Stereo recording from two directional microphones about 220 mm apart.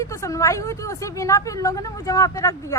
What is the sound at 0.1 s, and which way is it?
Speech, 15° left (ahead or behind).